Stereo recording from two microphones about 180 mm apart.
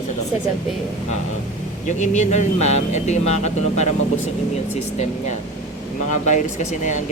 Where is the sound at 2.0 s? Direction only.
40° left (ahead or behind).